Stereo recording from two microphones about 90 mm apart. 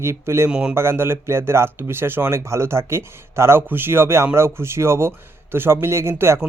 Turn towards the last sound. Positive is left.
turn(degrees=-30)  # may be behind; listen again after turning